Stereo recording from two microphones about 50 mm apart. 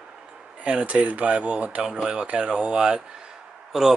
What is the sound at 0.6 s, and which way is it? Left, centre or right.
Speech, right.